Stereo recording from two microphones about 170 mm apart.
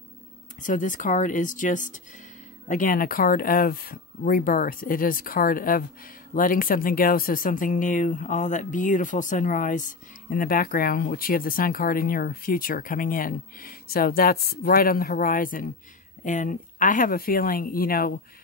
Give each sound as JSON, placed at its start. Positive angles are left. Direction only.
{"t": 0.6, "sound": "speech", "side_deg": 50}